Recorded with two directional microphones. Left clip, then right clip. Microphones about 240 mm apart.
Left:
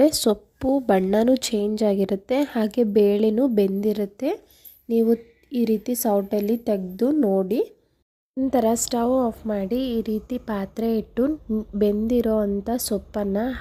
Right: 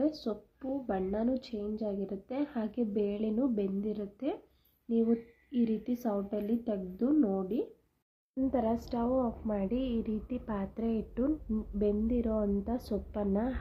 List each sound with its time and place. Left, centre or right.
0.0 s speech: left